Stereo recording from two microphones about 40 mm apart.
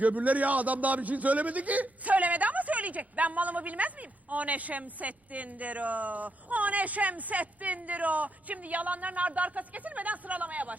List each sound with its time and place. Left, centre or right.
0.0 s a man's voice: right